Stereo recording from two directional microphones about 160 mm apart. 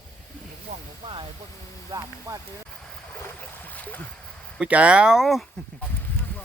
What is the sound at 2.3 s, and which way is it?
Speech, 20° right (ahead or behind).